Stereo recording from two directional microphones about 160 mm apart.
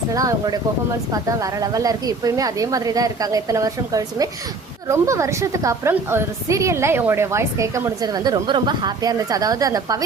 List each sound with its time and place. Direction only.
0.1 s a woman's voice: 20° right (ahead or behind)